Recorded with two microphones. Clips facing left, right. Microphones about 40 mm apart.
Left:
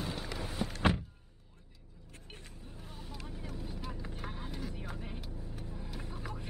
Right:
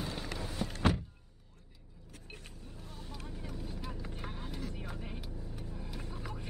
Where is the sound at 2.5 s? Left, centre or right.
Centre.